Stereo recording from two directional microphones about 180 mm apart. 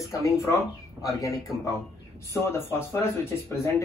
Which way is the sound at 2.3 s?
15° left (ahead or behind).